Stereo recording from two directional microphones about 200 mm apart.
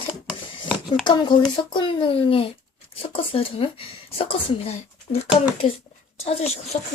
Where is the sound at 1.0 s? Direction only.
20° left (ahead or behind).